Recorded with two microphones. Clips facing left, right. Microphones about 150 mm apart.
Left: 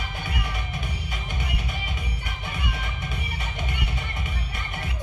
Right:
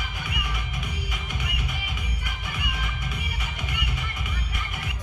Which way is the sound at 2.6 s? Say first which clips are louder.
Left 1 dB; 30° left (ahead or behind).